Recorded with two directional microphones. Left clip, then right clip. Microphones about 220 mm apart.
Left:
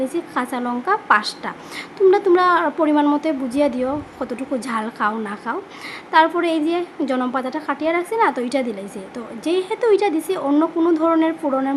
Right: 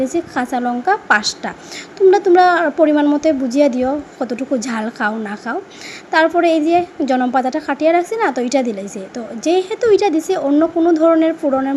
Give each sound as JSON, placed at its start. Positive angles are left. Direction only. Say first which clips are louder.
{"t": 0.0, "sound": "a woman's voice", "louder": "right 4 dB", "side_deg": -10}